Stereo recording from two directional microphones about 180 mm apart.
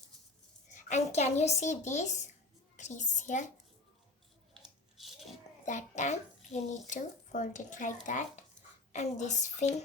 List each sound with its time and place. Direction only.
0.7 s speech: 40° left (ahead or behind)
4.5 s biting: centre (ahead or behind)
5.6 s speech: 40° left (ahead or behind)